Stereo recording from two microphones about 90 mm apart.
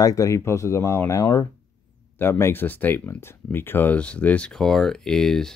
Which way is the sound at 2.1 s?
25° left (ahead or behind).